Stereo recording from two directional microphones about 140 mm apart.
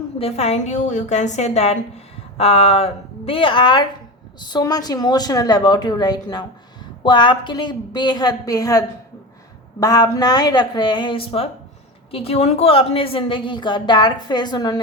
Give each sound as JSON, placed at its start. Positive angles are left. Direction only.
{"t": 0.2, "sound": "a woman's voice", "side_deg": 45}
{"t": 9.8, "sound": "a woman's voice", "side_deg": 25}